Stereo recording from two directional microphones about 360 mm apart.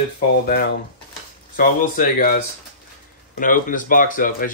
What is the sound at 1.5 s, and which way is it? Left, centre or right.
Speech, left.